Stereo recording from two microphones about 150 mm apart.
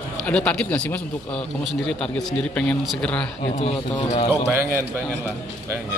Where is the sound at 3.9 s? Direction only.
30° left (ahead or behind).